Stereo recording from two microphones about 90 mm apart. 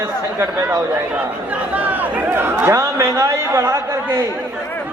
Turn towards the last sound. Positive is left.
turn(degrees=-30)  # may be behind; listen again after turning